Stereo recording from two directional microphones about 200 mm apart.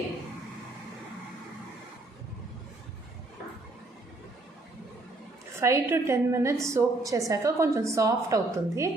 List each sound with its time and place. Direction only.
5.5 s a woman's voice: 15° right (ahead or behind)